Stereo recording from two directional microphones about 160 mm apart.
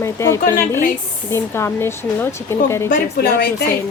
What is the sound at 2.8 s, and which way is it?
Speech, 70° left (ahead or behind).